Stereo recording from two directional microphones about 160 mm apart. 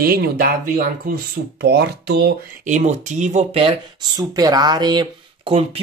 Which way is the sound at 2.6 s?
50° right (ahead or behind).